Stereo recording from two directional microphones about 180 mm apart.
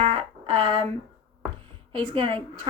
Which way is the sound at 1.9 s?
30° right (ahead or behind).